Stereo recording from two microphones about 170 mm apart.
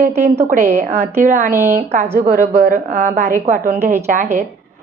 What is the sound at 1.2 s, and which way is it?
Speech, 55° right (ahead or behind).